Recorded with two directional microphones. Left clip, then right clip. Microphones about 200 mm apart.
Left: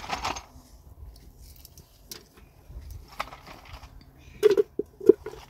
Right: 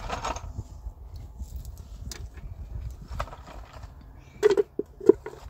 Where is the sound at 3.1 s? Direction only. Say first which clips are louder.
Left 1 dB; 55° right (ahead or behind).